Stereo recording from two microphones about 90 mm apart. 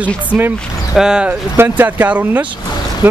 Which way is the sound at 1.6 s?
20° right (ahead or behind).